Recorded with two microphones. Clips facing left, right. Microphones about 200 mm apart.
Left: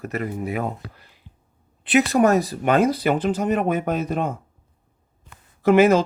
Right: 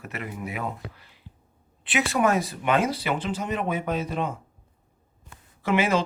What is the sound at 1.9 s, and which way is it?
Speech, 40° left (ahead or behind).